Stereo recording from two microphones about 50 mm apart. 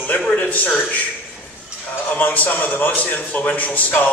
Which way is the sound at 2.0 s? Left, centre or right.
Left.